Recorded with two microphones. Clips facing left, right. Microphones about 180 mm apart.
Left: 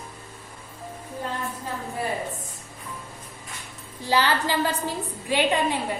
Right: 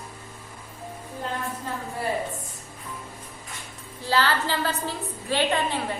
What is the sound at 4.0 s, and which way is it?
A woman's voice, 15° left (ahead or behind).